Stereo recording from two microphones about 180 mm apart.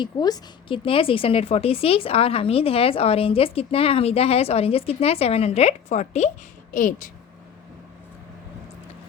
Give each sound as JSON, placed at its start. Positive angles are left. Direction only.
{"t": 0.0, "sound": "a woman's voice", "side_deg": 25}